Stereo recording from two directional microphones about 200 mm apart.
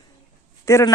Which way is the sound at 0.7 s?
15° left (ahead or behind).